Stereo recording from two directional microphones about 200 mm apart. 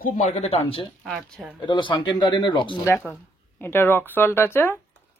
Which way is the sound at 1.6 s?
25° left (ahead or behind).